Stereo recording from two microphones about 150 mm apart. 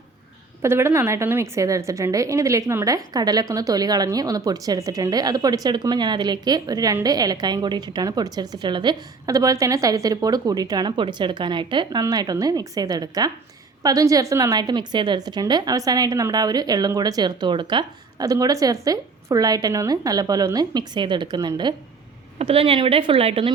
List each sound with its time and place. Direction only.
0.6 s a woman's voice: 15° right (ahead or behind)
22.4 s a woman's voice: 40° right (ahead or behind)